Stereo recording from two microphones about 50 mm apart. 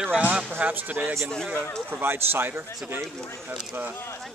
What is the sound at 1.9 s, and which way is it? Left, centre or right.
A man's voice, right.